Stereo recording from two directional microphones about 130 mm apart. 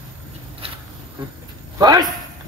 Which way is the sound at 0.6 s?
45° right (ahead or behind).